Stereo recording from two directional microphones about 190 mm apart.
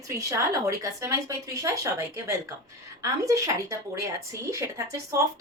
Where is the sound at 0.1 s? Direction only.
15° right (ahead or behind).